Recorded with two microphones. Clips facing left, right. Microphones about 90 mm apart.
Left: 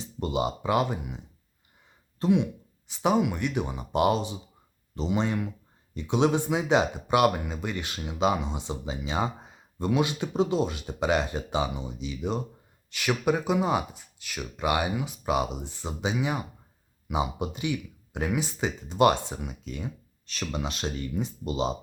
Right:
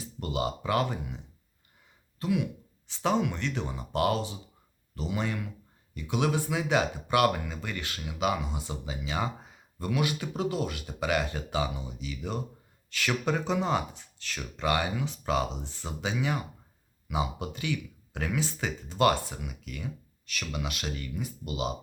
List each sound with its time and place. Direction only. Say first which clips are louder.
0.0 s speech: left 3 dB; 25° left (ahead or behind)
2.1 s speech: left 5 dB; 30° left (ahead or behind)